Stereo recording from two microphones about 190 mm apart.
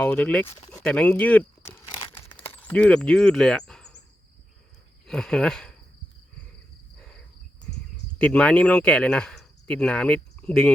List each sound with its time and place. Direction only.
0.0 s speech: 5° left (ahead or behind)
1.9 s crumpling: 25° left (ahead or behind)
2.5 s speech: 10° left (ahead or behind)
5.0 s speech: 5° left (ahead or behind)
8.2 s speech: 5° left (ahead or behind)